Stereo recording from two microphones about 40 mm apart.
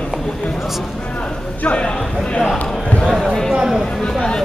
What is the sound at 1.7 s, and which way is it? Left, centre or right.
Speech, left.